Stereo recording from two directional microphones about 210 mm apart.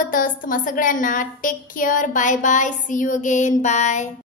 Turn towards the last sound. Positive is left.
turn(degrees=35)  # may be behind; listen again after turning